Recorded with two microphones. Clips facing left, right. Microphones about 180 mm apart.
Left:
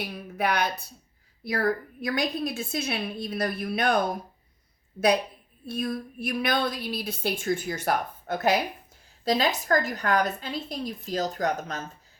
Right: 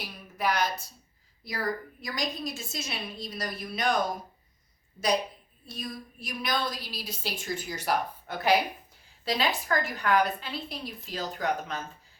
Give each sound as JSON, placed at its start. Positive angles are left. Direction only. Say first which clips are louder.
{"t": 0.0, "sound": "speech", "louder": "left 3 dB", "side_deg": 60}
{"t": 5.6, "sound": "a woman's voice", "louder": "left 9 dB", "side_deg": 60}